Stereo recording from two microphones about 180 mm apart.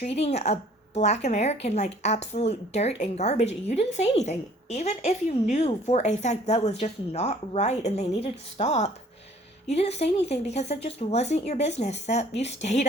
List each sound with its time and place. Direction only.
0.0 s speech: 35° left (ahead or behind)